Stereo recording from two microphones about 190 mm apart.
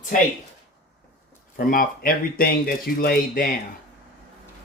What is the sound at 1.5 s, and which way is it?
Speech, 50° left (ahead or behind).